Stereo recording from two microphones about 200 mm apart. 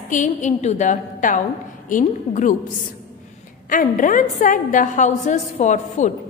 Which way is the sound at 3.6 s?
40° left (ahead or behind).